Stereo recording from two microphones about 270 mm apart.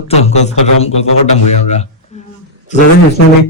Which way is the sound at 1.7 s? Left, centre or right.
Left.